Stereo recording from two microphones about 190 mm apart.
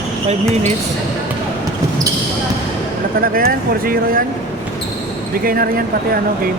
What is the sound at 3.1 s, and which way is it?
Speech, 50° right (ahead or behind).